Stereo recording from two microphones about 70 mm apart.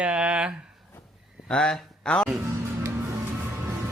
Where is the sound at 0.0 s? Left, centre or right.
Centre.